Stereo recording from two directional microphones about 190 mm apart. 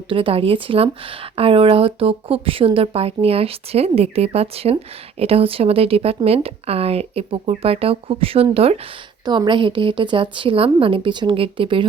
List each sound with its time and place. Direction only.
0.1 s speech: 25° right (ahead or behind)